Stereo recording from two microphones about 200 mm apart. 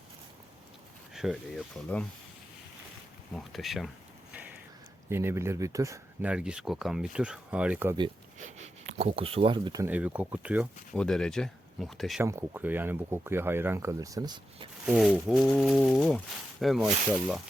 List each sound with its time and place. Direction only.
1.1 s speech: centre (ahead or behind)
3.3 s speech: centre (ahead or behind)
5.0 s speech: 10° right (ahead or behind)
6.3 s speech: 5° right (ahead or behind)
8.4 s speech: 35° right (ahead or behind)
9.8 s speech: 5° right (ahead or behind)
10.9 s speech: 5° left (ahead or behind)
12.2 s speech: 15° right (ahead or behind)
14.8 s speech: centre (ahead or behind)